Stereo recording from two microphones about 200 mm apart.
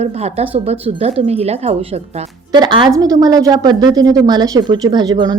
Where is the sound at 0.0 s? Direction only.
30° right (ahead or behind).